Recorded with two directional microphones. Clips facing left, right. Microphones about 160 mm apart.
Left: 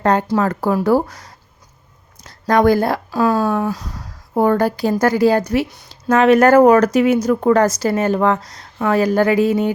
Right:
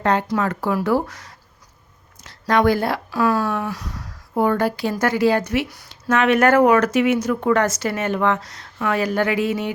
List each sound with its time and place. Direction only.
0.0 s speech: 40° left (ahead or behind)
3.1 s speech: 25° left (ahead or behind)